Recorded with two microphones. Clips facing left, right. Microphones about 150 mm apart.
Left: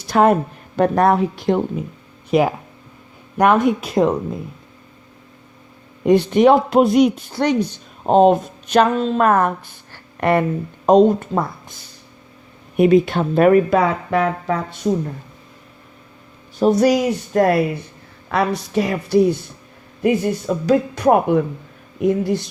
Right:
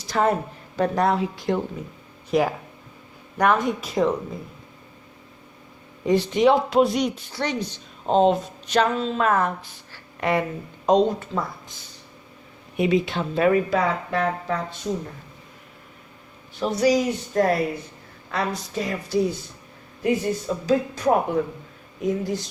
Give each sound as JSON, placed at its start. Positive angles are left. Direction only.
{"t": 0.1, "sound": "a woman's voice", "side_deg": 65}
{"t": 6.1, "sound": "speech", "side_deg": 60}
{"t": 12.7, "sound": "speech", "side_deg": 55}
{"t": 16.6, "sound": "speech", "side_deg": 50}